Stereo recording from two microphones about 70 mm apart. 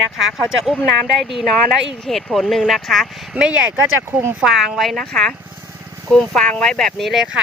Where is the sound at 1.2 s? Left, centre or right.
Centre.